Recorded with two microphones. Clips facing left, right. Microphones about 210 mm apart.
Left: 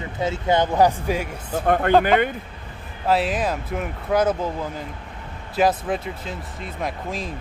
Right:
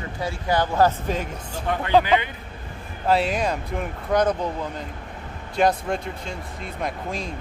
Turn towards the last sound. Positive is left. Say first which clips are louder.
# left 1 dB
turn(degrees=0)  # may be behind; listen again after turning